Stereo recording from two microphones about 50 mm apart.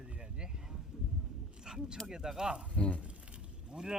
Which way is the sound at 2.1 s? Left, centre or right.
Centre.